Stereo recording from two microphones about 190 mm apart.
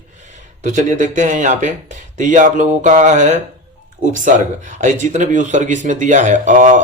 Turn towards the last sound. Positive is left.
turn(degrees=-40)  # may be behind; listen again after turning